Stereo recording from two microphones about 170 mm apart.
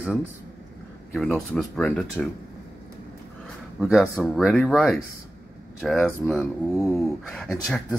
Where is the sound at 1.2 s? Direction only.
5° left (ahead or behind).